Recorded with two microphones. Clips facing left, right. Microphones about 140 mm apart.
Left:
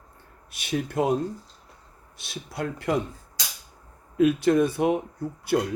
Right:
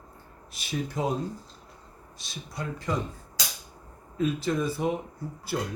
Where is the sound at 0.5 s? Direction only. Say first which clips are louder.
Left 5 dB; 65° left (ahead or behind).